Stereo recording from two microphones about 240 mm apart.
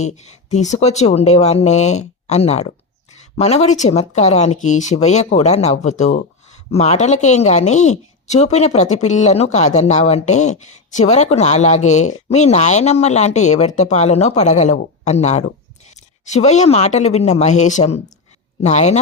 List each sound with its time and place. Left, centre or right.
0.0 s speech: left